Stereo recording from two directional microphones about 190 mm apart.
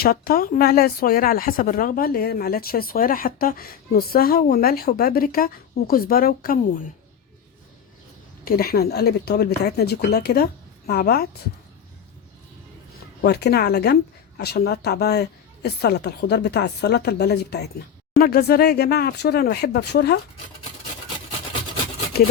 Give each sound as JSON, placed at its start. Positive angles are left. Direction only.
{"t": 0.0, "sound": "speech", "side_deg": 50}
{"t": 8.4, "sound": "a woman's voice", "side_deg": 50}
{"t": 13.2, "sound": "a woman's voice", "side_deg": 60}